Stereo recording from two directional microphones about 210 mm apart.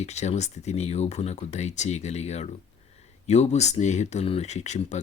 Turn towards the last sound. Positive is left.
turn(degrees=35)  # may be behind; listen again after turning